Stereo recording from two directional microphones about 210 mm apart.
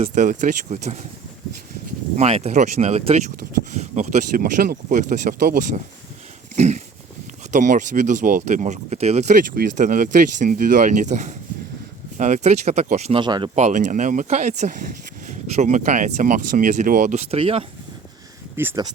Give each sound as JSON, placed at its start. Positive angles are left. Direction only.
{"t": 0.0, "sound": "speech", "side_deg": -35}
{"t": 2.1, "sound": "speech", "side_deg": -30}
{"t": 6.6, "sound": "speech", "side_deg": -35}
{"t": 13.6, "sound": "speech", "side_deg": -35}
{"t": 18.5, "sound": "speech", "side_deg": -10}